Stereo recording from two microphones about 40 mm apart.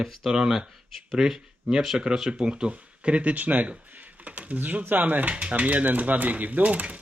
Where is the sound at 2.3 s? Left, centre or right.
Right.